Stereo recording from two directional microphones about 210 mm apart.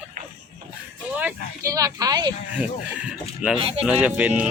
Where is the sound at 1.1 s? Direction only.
10° right (ahead or behind).